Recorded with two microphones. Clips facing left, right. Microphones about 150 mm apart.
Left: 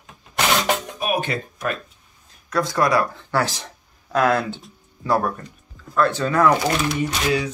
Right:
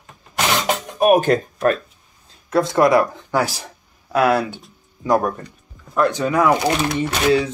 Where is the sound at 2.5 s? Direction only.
25° right (ahead or behind).